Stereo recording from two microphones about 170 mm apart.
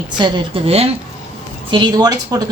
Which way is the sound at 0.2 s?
30° right (ahead or behind).